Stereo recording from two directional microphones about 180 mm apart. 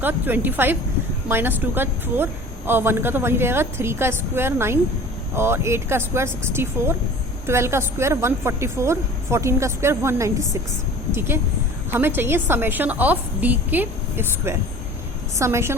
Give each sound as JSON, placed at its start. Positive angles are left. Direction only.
{"t": 0.0, "sound": "a woman's voice", "side_deg": -10}